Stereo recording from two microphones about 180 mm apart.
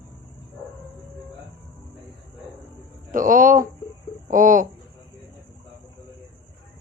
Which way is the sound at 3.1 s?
50° right (ahead or behind).